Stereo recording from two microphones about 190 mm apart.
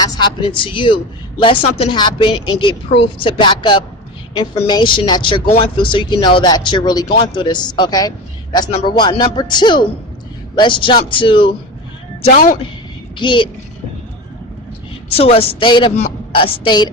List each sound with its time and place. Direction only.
0.0 s a man's voice: 25° left (ahead or behind)
12.2 s speech: 45° left (ahead or behind)
13.1 s a man's voice: 25° left (ahead or behind)
15.1 s a man's voice: 30° left (ahead or behind)